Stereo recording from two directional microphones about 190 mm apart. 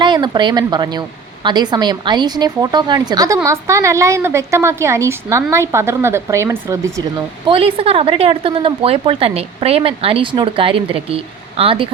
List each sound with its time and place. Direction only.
0.0 s speech: 25° right (ahead or behind)
7.4 s speech: 30° right (ahead or behind)